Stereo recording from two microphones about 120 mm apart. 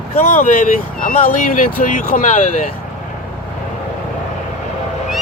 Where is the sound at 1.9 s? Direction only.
90° left.